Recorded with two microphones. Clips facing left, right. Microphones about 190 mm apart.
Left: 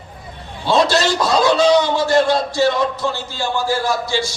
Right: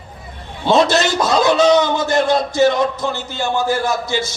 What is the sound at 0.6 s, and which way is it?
A man's voice, 20° right (ahead or behind).